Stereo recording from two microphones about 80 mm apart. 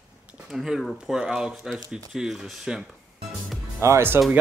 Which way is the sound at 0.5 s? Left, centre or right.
Centre.